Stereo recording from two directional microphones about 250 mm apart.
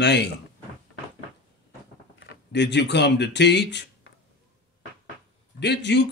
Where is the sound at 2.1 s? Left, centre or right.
Left.